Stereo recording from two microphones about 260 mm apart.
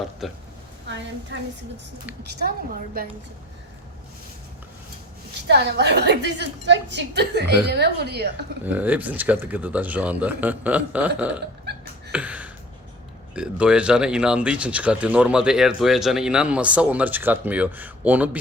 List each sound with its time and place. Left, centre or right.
0.2 s speech: centre
0.9 s a sound: right
5.5 s a woman's voice: right
8.6 s speech: centre
12.1 s speech: centre